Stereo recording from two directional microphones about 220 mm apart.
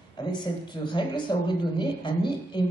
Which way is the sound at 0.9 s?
20° left (ahead or behind).